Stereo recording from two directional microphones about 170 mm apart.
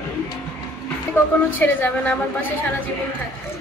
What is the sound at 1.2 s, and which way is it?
A woman's voice, 10° left (ahead or behind).